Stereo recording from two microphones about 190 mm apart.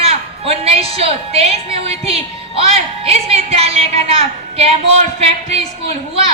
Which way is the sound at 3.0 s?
30° right (ahead or behind).